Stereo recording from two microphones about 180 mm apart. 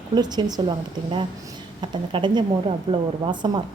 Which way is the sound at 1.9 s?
25° right (ahead or behind).